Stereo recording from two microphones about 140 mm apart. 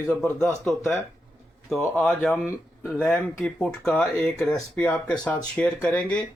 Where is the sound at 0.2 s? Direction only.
5° left (ahead or behind).